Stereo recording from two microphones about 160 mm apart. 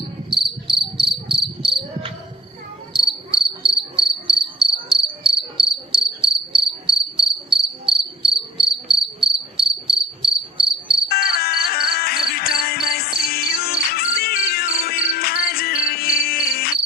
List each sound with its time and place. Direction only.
0.3 s insect: 30° right (ahead or behind)
11.1 s music: 70° left (ahead or behind)